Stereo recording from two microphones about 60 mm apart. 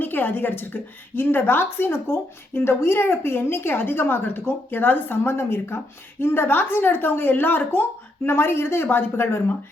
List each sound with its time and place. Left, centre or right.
0.0 s a woman's voice: left